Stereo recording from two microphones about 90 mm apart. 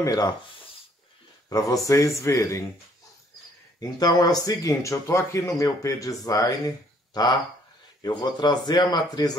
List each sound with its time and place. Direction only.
0.0 s speech: 45° left (ahead or behind)
1.5 s speech: 40° left (ahead or behind)
4.0 s speech: 45° left (ahead or behind)
8.0 s speech: 55° left (ahead or behind)